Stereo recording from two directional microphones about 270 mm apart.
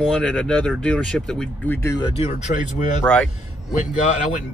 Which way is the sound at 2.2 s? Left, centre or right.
Left.